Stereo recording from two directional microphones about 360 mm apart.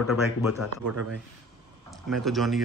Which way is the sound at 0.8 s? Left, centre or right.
Right.